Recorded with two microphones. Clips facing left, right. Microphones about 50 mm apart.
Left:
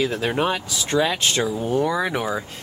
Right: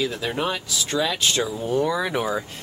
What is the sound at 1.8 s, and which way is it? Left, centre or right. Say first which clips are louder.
Speech: left 1 dB; centre.